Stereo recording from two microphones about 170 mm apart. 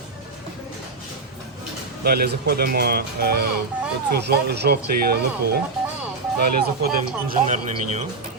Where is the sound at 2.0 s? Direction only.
70° right (ahead or behind).